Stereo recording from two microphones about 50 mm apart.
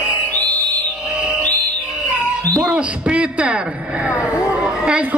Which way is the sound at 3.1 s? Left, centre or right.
Right.